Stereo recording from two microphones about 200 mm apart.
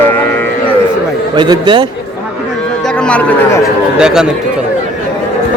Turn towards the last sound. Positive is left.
turn(degrees=-5)  # may be behind; listen again after turning